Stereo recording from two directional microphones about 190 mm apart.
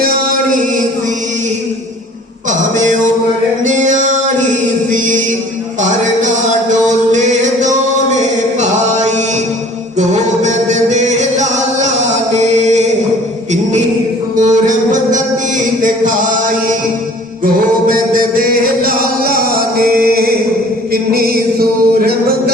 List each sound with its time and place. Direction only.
0.0 s chant: 45° right (ahead or behind)
2.5 s music: 40° right (ahead or behind)
5.8 s music: 40° right (ahead or behind)
8.6 s chant: 40° right (ahead or behind)
10.0 s music: 40° right (ahead or behind)
12.3 s chant: 35° right (ahead or behind)
14.3 s music: 40° right (ahead or behind)
17.4 s music: 45° right (ahead or behind)